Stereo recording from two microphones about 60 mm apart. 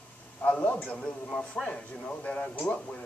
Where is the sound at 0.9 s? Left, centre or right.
Centre.